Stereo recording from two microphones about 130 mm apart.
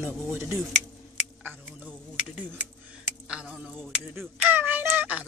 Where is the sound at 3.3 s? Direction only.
5° right (ahead or behind).